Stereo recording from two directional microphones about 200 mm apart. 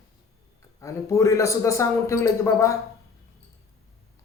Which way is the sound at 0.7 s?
15° left (ahead or behind).